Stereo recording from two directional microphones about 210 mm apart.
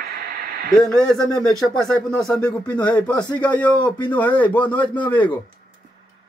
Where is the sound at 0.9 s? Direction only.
5° left (ahead or behind).